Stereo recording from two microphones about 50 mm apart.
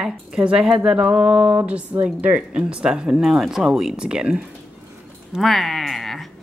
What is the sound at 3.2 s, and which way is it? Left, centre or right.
Speech, centre.